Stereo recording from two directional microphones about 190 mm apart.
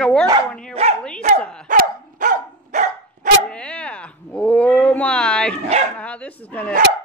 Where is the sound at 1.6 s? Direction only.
45° right (ahead or behind).